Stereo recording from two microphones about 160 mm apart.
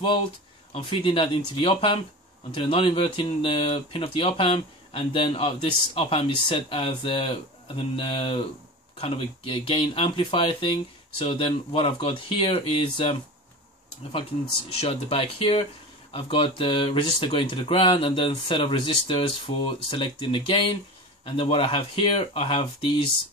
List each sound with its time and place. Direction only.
0.7 s speech: 30° left (ahead or behind)
14.7 s speech: 35° left (ahead or behind)